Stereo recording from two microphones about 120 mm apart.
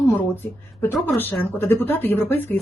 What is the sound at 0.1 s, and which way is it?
Speech, 15° left (ahead or behind).